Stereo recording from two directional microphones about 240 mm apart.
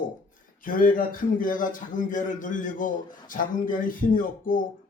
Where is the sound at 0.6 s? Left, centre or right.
Left.